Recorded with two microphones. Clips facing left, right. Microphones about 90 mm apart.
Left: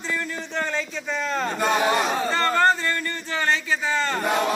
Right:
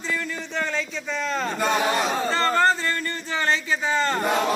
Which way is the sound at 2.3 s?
25° right (ahead or behind).